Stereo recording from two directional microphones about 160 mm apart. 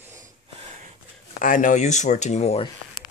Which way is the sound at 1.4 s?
55° left (ahead or behind).